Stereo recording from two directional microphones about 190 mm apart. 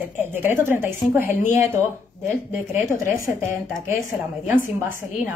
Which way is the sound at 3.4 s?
15° right (ahead or behind).